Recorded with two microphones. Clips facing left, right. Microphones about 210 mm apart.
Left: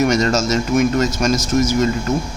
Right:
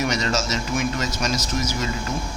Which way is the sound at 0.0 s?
45° left (ahead or behind).